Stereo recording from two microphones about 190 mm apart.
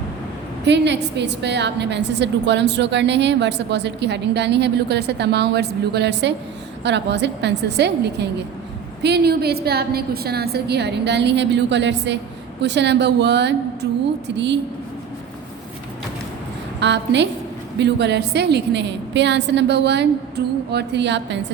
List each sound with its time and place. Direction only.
0.6 s a woman's voice: 65° right (ahead or behind)
16.8 s a woman's voice: 65° right (ahead or behind)